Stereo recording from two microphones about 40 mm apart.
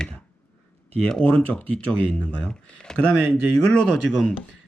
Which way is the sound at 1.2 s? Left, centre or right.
Left.